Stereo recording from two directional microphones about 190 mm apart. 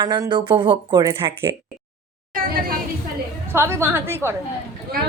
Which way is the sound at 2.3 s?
50° right (ahead or behind).